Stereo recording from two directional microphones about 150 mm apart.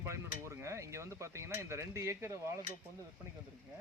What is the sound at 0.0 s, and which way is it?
Speech, 20° right (ahead or behind).